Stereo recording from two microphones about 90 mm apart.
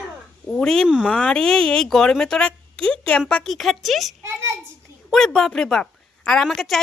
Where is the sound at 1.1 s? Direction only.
10° left (ahead or behind).